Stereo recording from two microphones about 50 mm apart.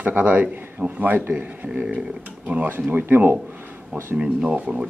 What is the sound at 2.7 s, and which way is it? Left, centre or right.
Speech, right.